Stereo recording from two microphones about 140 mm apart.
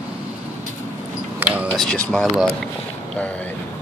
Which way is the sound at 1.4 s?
10° right (ahead or behind).